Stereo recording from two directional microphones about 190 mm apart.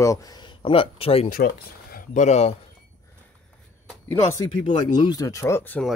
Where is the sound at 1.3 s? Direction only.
50° left (ahead or behind).